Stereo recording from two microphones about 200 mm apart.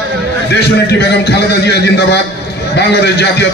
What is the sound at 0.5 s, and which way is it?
A man's voice, 55° left (ahead or behind).